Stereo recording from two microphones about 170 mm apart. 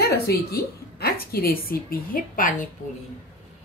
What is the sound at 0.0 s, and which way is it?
A woman's voice, 65° left (ahead or behind).